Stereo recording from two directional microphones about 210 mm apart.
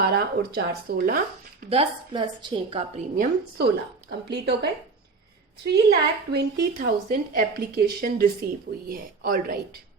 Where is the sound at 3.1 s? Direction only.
50° right (ahead or behind).